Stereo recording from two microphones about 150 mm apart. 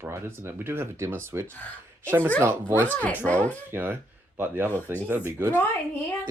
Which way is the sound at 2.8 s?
10° left (ahead or behind).